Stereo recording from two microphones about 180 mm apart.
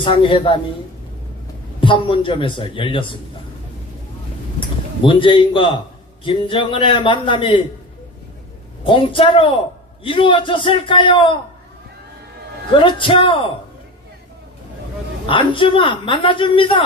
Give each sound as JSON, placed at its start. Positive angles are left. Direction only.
{"t": 0.0, "sound": "speech", "side_deg": 30}
{"t": 1.8, "sound": "speech", "side_deg": 30}
{"t": 5.0, "sound": "speech", "side_deg": 30}
{"t": 8.8, "sound": "speech", "side_deg": 30}
{"t": 12.8, "sound": "speech", "side_deg": 25}
{"t": 15.3, "sound": "speech", "side_deg": 25}